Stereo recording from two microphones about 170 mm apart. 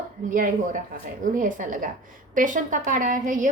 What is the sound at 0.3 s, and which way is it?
A woman's voice, 50° right (ahead or behind).